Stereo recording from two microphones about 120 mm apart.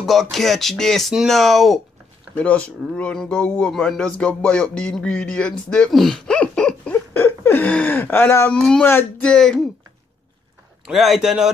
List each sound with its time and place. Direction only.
0.0 s speech: centre (ahead or behind)
2.3 s speech: 10° left (ahead or behind)
7.2 s a sound: 20° left (ahead or behind)
8.5 s speech: 5° left (ahead or behind)
10.9 s speech: centre (ahead or behind)